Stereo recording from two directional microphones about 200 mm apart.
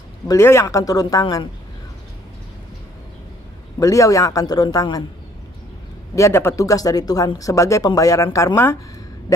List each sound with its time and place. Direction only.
0.3 s speech: 15° left (ahead or behind)
3.8 s speech: 15° left (ahead or behind)
6.1 s speech: 15° left (ahead or behind)